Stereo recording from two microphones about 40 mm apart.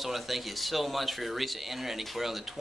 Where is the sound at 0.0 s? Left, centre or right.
Centre.